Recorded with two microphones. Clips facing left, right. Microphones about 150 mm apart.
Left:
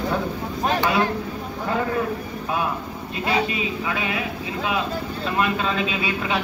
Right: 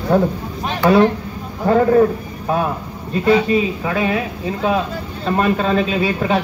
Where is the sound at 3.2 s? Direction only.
40° right (ahead or behind).